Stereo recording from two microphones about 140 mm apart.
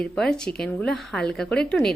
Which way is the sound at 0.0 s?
5° left (ahead or behind).